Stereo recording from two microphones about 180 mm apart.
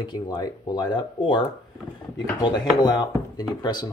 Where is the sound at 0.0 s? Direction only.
25° left (ahead or behind).